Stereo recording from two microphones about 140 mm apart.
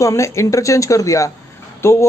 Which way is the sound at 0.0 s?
20° left (ahead or behind).